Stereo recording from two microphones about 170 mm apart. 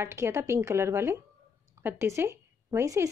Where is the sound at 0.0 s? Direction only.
15° right (ahead or behind).